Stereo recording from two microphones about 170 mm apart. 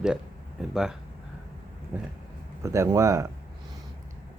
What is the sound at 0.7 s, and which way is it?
Speech, 5° right (ahead or behind).